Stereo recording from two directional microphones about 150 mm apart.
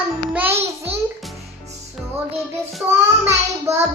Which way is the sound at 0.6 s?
40° right (ahead or behind).